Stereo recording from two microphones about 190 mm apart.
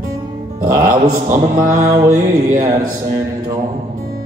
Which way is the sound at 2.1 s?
45° right (ahead or behind).